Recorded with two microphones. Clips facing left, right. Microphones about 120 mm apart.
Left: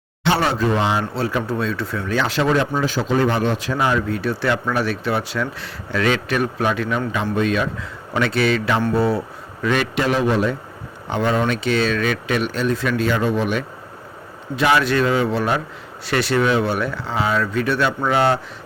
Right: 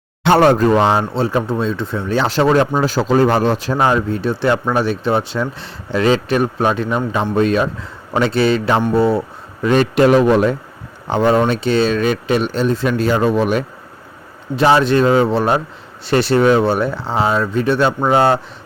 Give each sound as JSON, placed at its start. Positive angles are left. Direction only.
{"t": 0.3, "sound": "a man's voice", "side_deg": -50}
{"t": 1.1, "sound": "speech", "side_deg": -25}
{"t": 9.6, "sound": "a man's voice", "side_deg": -45}
{"t": 11.1, "sound": "speech", "side_deg": -35}
{"t": 14.5, "sound": "speech", "side_deg": -30}